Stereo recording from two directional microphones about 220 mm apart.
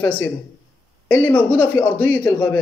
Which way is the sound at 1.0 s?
5° left (ahead or behind).